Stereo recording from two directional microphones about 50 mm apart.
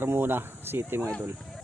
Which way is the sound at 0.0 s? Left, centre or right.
Right.